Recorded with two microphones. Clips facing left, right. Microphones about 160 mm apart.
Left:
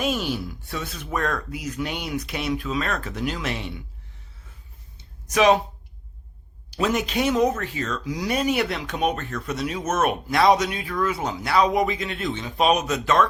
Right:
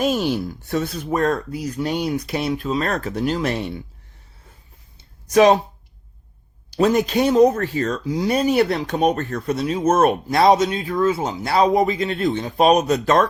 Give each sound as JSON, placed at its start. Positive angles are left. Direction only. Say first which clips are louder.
{"t": 0.0, "sound": "speech", "louder": "right 5 dB", "side_deg": -40}
{"t": 5.3, "sound": "speech", "louder": "right 5 dB", "side_deg": -35}
{"t": 6.7, "sound": "speech", "louder": "right 6 dB", "side_deg": -40}
{"t": 8.1, "sound": "speech", "louder": "right 5 dB", "side_deg": -30}